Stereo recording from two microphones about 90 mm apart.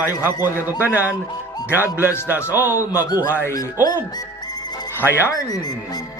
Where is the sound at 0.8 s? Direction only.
20° right (ahead or behind).